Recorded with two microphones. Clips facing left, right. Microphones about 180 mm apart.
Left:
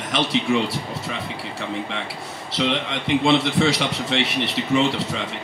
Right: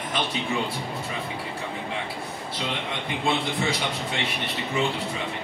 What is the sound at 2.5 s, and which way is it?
A man's voice, 80° left.